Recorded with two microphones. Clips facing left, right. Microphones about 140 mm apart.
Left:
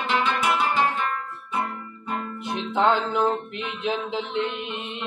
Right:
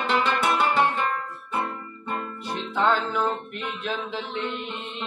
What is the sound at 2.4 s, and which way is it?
Music, 20° left (ahead or behind).